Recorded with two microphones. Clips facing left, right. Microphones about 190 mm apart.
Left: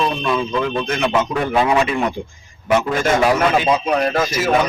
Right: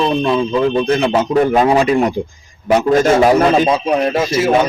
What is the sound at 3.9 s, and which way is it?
Speech, 20° right (ahead or behind).